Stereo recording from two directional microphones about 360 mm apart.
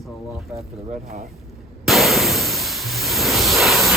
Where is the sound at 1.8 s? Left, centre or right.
Centre.